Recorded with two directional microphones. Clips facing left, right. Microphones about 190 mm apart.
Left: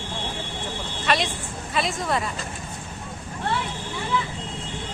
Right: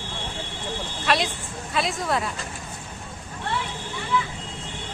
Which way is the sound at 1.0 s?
Centre (ahead or behind).